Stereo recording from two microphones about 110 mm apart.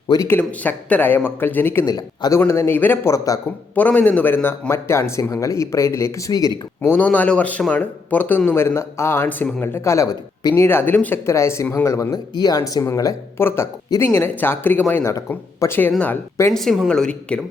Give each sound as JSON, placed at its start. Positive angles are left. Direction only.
{"t": 0.3, "sound": "speech", "side_deg": 15}
{"t": 1.8, "sound": "speech", "side_deg": 35}
{"t": 2.4, "sound": "speech", "side_deg": 20}
{"t": 3.8, "sound": "speech", "side_deg": 15}
{"t": 4.7, "sound": "speech", "side_deg": 25}
{"t": 6.8, "sound": "speech", "side_deg": 15}
{"t": 10.5, "sound": "speech", "side_deg": 20}
{"t": 12.3, "sound": "speech", "side_deg": 40}
{"t": 16.5, "sound": "speech", "side_deg": 0}